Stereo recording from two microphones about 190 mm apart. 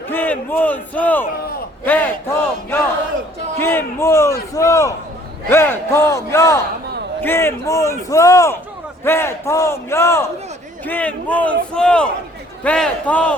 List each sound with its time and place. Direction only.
0.1 s a man's voice: 10° left (ahead or behind)
3.6 s a sound: 10° left (ahead or behind)
5.5 s a man's voice: 15° left (ahead or behind)